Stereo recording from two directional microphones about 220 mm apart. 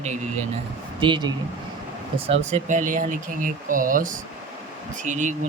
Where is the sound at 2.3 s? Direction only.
30° right (ahead or behind).